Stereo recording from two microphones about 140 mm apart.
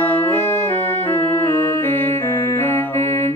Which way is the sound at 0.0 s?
15° left (ahead or behind).